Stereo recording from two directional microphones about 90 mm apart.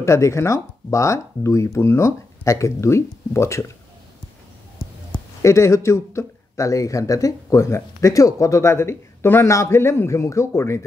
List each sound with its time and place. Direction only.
0.0 s speech: 30° left (ahead or behind)
5.4 s speech: 35° left (ahead or behind)